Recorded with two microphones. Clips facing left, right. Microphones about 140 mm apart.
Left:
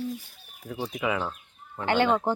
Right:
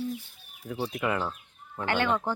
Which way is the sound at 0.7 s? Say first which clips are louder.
Even; centre (ahead or behind).